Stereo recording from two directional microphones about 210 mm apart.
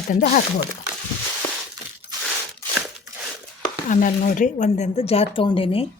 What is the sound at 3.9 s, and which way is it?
Speech, 35° left (ahead or behind).